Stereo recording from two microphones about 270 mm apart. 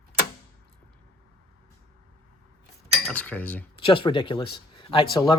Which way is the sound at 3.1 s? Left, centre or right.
Centre.